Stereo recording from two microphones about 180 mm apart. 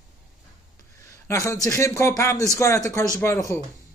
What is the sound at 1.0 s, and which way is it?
A man's voice, 15° left (ahead or behind).